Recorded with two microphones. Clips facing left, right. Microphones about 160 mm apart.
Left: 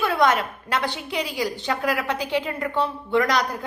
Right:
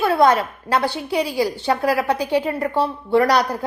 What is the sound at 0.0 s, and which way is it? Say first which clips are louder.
A woman's voice: right 5 dB; 35° right (ahead or behind).